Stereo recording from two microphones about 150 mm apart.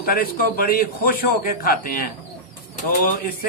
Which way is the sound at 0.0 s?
80° left.